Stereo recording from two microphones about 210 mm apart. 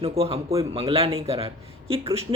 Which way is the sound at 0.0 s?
30° right (ahead or behind).